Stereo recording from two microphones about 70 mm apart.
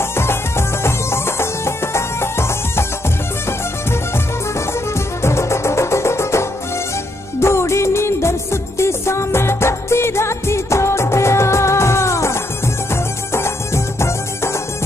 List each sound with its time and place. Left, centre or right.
0.2 s music: left
5.2 s music: left
7.3 s music of bollywood: left
12.9 s music: left